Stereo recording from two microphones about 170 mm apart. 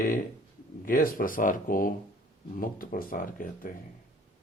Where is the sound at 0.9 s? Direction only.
55° left (ahead or behind).